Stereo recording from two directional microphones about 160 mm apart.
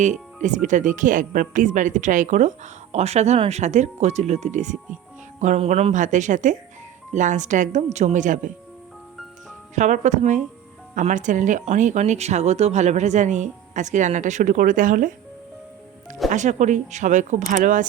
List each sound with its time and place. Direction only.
0.4 s speech: 50° right (ahead or behind)
9.7 s speech: 50° right (ahead or behind)
16.3 s speech: 50° right (ahead or behind)